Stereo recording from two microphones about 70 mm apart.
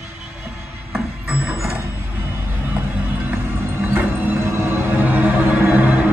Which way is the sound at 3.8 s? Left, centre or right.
Right.